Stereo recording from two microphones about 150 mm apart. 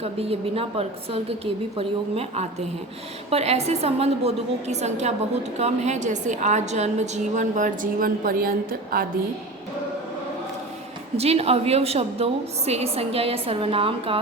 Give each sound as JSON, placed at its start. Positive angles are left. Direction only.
{"t": 0.0, "sound": "a woman's voice", "side_deg": -40}
{"t": 11.2, "sound": "a woman's voice", "side_deg": -45}